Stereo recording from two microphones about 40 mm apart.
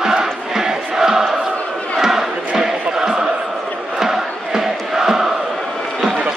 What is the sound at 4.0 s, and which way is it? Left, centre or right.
Crowd, centre.